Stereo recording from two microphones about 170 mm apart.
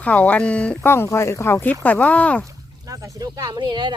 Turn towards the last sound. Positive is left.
turn(degrees=-25)  # may be behind; listen again after turning